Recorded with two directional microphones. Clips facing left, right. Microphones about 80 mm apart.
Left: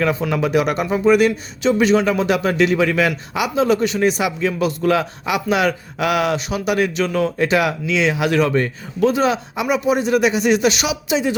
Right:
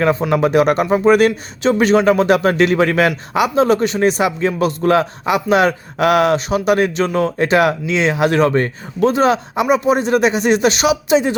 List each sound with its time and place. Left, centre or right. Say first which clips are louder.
0.0 s a man's voice: right 4 dB; right